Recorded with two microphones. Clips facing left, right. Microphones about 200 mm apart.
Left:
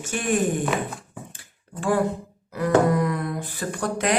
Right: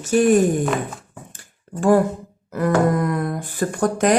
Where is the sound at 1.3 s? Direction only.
45° right (ahead or behind).